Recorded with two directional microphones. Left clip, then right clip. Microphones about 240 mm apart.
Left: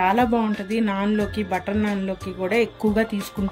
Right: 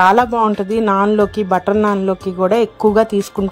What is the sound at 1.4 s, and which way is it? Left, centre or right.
Speech, right.